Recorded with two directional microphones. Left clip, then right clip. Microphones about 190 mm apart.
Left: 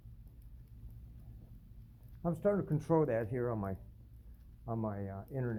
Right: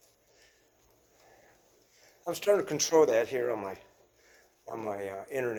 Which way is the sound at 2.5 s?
25° right (ahead or behind).